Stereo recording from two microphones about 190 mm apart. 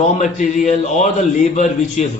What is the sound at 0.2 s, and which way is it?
A man's voice, 40° left (ahead or behind).